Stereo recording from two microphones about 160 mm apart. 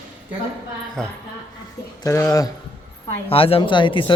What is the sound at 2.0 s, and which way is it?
Speech, 20° left (ahead or behind).